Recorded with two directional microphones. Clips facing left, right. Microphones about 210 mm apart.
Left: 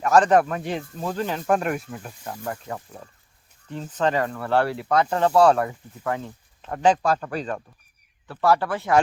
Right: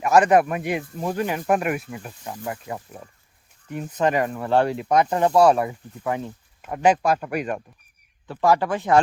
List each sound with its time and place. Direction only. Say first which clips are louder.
0.0 s speech: right 1 dB; 10° right (ahead or behind)